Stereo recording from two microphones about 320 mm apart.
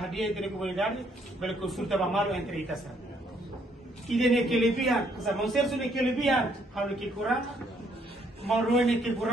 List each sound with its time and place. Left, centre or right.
0.0 s a man's voice: centre
4.1 s a man's voice: centre
8.5 s a man's voice: centre